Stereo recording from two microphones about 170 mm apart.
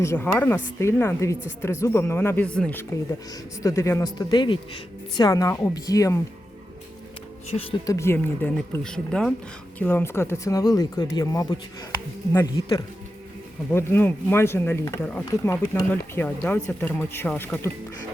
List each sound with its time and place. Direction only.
0.0 s speech: 15° left (ahead or behind)
7.9 s speech: 15° left (ahead or behind)
13.7 s speech: 15° left (ahead or behind)